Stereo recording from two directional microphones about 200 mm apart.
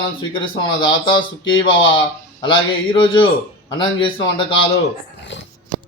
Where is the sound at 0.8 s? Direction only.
25° left (ahead or behind).